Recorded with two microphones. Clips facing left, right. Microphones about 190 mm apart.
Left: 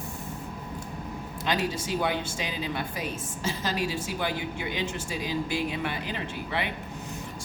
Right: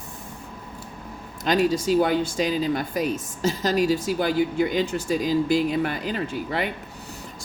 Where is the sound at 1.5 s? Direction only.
40° right (ahead or behind).